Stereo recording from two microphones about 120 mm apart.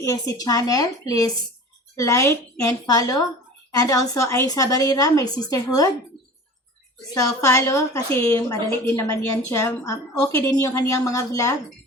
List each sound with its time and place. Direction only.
0.0 s a woman's voice: 30° left (ahead or behind)
7.1 s a woman's voice: 30° left (ahead or behind)